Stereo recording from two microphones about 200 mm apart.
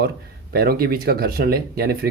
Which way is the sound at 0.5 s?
50° right (ahead or behind).